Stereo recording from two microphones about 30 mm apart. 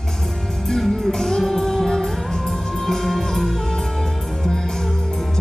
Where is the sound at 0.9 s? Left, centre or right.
Centre.